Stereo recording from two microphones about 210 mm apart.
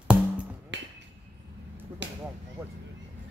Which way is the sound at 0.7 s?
55° right (ahead or behind).